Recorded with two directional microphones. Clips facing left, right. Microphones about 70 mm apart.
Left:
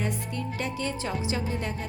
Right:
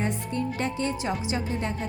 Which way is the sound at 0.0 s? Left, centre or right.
Right.